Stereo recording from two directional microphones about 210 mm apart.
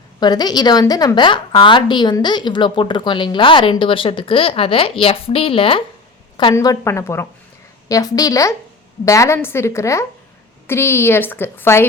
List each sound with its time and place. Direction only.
0.2 s a woman's voice: 20° left (ahead or behind)